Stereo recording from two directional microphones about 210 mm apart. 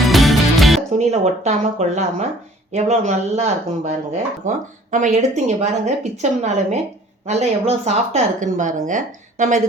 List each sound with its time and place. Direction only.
0.0 s music: centre (ahead or behind)
0.9 s a woman's voice: 30° right (ahead or behind)